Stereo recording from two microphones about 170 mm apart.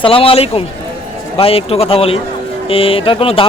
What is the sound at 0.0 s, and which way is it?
A man's voice, 35° left (ahead or behind).